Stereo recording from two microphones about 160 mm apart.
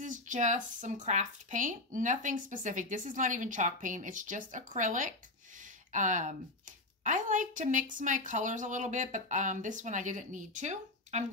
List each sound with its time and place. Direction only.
0.0 s speech: 50° right (ahead or behind)